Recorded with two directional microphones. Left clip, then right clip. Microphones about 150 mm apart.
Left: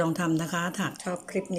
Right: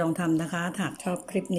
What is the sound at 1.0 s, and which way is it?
Speech, 15° right (ahead or behind).